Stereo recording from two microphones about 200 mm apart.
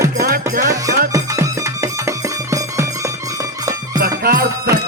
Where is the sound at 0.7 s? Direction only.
15° right (ahead or behind).